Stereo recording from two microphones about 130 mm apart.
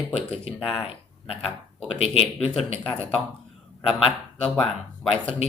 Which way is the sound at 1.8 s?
50° left (ahead or behind).